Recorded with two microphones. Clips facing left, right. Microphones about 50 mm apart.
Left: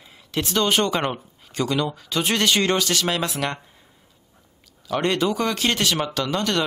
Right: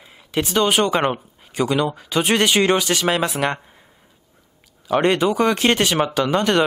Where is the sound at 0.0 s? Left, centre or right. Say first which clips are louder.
Right 4 dB; centre.